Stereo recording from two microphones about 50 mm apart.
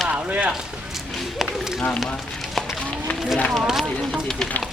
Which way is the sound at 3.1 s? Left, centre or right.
Centre.